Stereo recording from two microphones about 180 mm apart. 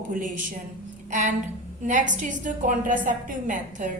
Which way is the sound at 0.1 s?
45° right (ahead or behind).